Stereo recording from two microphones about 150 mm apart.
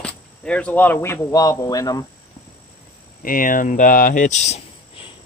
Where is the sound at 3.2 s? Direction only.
70° left (ahead or behind); by 4.6 s 50° left (ahead or behind).